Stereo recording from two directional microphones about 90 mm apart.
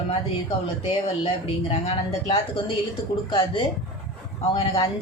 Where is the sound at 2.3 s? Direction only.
70° left (ahead or behind).